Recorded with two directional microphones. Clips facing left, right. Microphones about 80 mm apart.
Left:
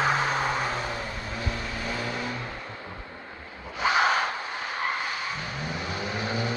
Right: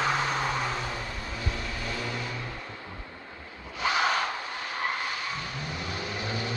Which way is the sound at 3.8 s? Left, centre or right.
Left.